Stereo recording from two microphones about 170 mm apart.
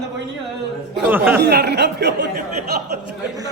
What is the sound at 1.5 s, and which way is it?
Speech, 75° right (ahead or behind).